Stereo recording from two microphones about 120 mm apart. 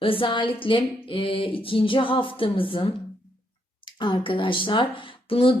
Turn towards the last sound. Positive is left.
turn(degrees=45)  # may be behind; listen again after turning